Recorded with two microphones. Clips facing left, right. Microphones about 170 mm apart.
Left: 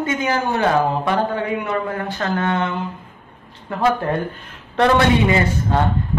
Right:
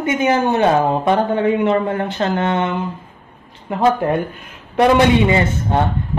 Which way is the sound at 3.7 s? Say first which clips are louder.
Right 3 dB; 20° right (ahead or behind).